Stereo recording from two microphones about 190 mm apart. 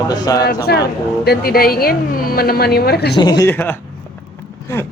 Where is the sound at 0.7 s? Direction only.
55° left (ahead or behind).